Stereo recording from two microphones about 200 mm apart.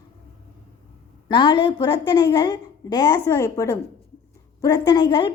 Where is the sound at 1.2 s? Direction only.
25° left (ahead or behind).